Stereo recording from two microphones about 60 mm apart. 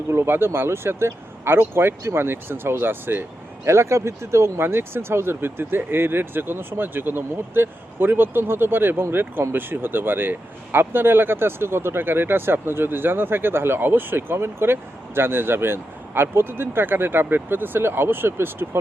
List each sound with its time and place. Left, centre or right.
0.1 s speech: right
3.7 s speech: right